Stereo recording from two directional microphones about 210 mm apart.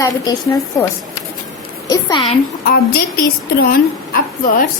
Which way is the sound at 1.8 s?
20° left (ahead or behind).